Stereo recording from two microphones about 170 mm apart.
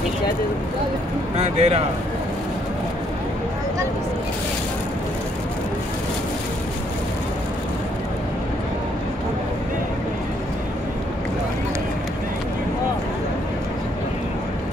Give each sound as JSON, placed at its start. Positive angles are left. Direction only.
{"t": 1.3, "sound": "speech", "side_deg": -40}